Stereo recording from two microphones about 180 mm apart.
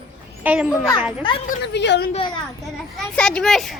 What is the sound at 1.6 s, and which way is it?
Speech, 75° left (ahead or behind).